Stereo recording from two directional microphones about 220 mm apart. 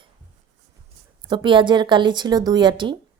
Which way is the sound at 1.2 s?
20° right (ahead or behind).